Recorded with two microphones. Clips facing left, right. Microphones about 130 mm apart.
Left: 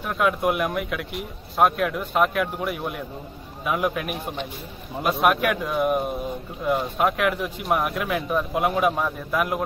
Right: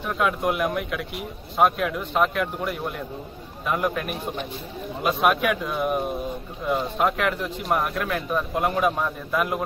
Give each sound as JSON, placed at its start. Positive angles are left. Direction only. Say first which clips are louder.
{"t": 0.0, "sound": "speech", "louder": "left 1 dB", "side_deg": 0}